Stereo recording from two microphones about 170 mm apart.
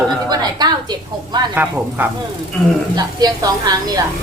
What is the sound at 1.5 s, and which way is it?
Speech, 10° right (ahead or behind).